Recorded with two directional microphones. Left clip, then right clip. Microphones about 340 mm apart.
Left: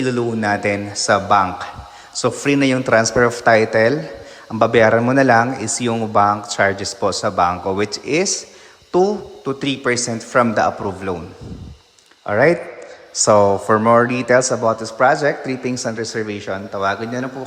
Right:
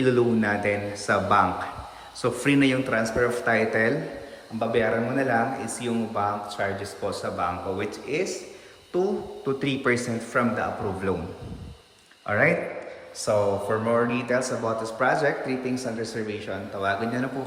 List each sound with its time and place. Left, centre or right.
0.0 s a man's voice: centre
9.5 s a man's voice: centre
12.2 s a man's voice: centre